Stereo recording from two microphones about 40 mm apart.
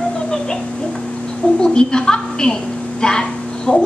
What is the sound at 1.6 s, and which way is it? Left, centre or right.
A woman's voice, centre.